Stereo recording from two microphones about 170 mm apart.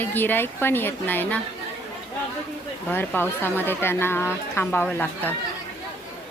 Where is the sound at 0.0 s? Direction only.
10° left (ahead or behind).